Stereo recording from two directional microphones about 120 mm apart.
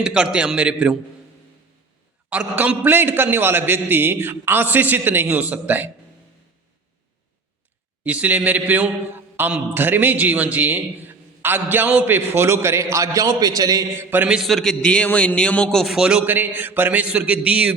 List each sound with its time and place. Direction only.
0.0 s a man's voice: 5° right (ahead or behind)
2.3 s a man's voice: 15° right (ahead or behind)
8.0 s a man's voice: 15° right (ahead or behind); by 13.8 s 30° right (ahead or behind)
14.1 s a man's voice: 15° right (ahead or behind)
14.3 s a man's voice: centre (ahead or behind)